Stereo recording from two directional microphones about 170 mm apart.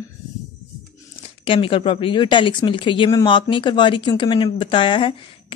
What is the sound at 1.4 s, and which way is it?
Speech, 30° left (ahead or behind).